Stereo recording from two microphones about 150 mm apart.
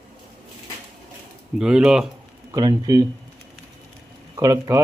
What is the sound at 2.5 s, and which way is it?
Speech, 25° right (ahead or behind).